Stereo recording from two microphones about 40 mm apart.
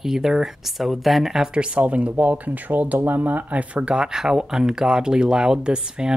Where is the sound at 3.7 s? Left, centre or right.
Right.